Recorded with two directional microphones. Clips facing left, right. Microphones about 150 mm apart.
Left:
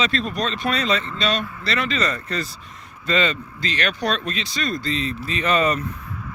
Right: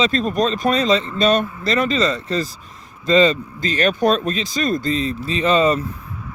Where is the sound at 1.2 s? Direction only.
45° right (ahead or behind).